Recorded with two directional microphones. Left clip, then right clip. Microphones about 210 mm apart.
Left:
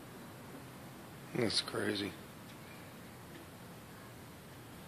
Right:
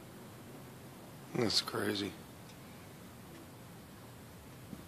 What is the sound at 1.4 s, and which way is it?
Speech, 15° right (ahead or behind).